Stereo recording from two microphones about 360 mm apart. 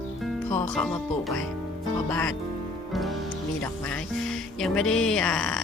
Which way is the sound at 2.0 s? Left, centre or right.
Centre.